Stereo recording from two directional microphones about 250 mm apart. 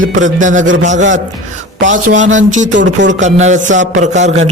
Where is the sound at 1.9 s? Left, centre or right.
Right.